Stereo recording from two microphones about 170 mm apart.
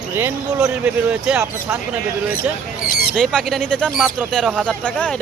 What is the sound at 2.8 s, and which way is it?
Speech, 60° left (ahead or behind).